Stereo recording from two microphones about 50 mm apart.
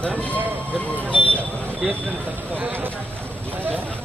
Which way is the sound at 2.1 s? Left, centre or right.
Right.